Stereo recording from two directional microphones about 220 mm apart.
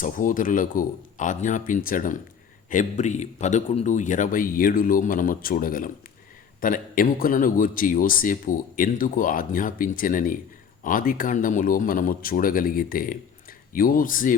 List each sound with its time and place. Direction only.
0.0 s a man's voice: 35° left (ahead or behind)